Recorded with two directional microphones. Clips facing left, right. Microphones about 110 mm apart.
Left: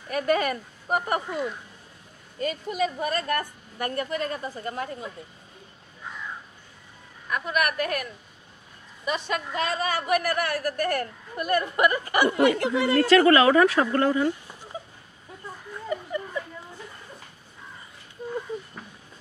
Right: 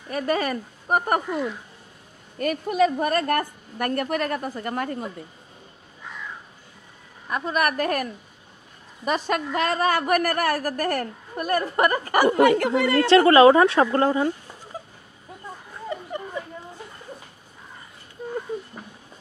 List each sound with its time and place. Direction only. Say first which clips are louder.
0.1 s speech: even; 35° right (ahead or behind)
2.3 s a woman's voice: right 5 dB; 60° right (ahead or behind)
7.2 s a woman's voice: right 2 dB; 30° right (ahead or behind); by 13.1 s 60° right (ahead or behind)
13.1 s a woman's voice: right 4 dB; 30° right (ahead or behind)